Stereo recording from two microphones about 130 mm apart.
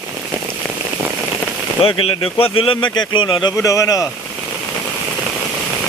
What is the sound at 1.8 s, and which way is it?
Speech, 45° left (ahead or behind).